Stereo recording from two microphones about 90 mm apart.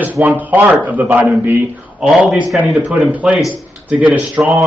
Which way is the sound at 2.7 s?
15° right (ahead or behind).